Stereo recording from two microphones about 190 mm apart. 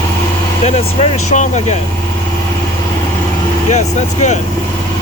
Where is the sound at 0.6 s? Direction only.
35° left (ahead or behind).